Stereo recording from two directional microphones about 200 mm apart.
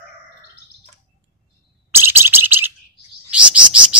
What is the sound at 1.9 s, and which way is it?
Alarm, 10° right (ahead or behind).